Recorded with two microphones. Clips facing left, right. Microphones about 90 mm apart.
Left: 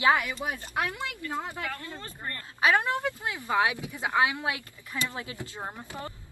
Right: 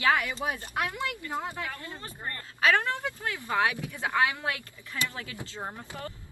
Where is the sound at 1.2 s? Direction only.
20° right (ahead or behind).